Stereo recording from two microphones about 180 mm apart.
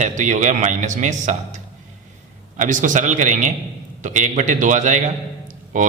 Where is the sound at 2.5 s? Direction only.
45° right (ahead or behind).